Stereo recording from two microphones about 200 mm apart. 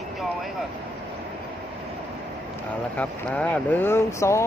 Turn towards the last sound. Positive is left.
turn(degrees=15)  # may be behind; listen again after turning